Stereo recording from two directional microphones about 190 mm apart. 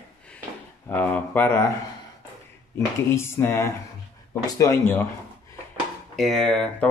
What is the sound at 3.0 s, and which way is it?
A man's voice, 15° left (ahead or behind).